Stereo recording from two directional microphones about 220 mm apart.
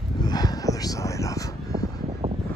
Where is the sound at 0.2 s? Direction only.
20° left (ahead or behind).